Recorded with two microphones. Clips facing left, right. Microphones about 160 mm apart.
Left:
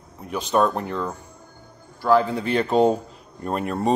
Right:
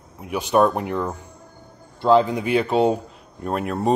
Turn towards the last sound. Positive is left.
turn(degrees=0)  # may be behind; listen again after turning